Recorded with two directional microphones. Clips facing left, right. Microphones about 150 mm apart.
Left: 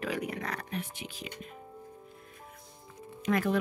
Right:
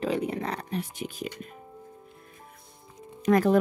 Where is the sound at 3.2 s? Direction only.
40° right (ahead or behind).